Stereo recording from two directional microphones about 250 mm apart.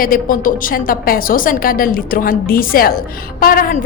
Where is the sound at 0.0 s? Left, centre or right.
Left.